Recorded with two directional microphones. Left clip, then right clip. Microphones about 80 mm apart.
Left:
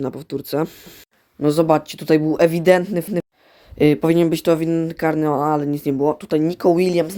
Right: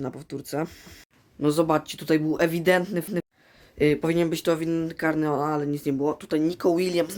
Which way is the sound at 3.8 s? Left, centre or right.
Left.